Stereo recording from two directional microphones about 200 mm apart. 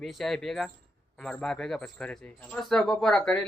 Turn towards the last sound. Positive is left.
turn(degrees=5)  # may be behind; listen again after turning